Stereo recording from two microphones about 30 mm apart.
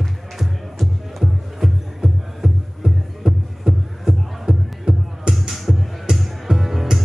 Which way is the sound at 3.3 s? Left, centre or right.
Centre.